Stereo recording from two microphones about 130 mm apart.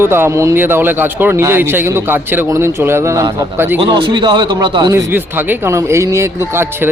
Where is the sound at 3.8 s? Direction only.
40° right (ahead or behind).